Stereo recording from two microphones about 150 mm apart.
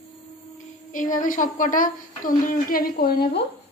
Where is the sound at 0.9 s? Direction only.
60° left (ahead or behind); by 3.4 s 85° left.